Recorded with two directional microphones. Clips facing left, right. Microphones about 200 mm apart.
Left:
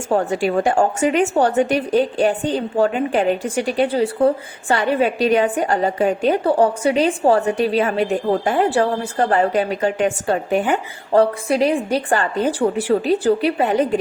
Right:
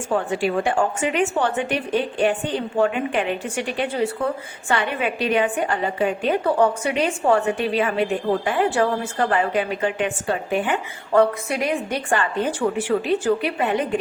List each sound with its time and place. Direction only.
0.1 s a woman's voice: 40° left (ahead or behind)